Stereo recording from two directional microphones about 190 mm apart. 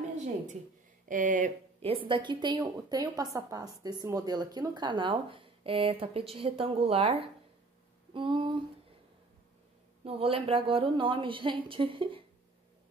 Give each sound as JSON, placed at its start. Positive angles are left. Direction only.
{"t": 1.0, "sound": "speech", "side_deg": -45}
{"t": 10.0, "sound": "speech", "side_deg": -30}